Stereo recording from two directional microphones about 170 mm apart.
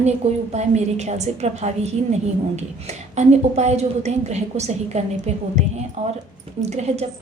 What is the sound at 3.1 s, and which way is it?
A woman's voice, 40° right (ahead or behind).